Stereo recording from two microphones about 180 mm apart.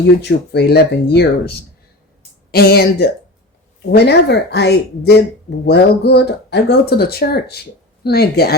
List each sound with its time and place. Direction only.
0.2 s speech: 65° left (ahead or behind)